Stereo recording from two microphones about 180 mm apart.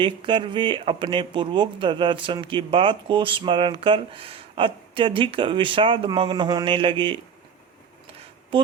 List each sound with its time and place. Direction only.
0.0 s speech: 25° right (ahead or behind)